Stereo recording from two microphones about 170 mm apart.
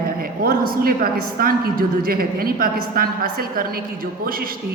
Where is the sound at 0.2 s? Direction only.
60° right (ahead or behind).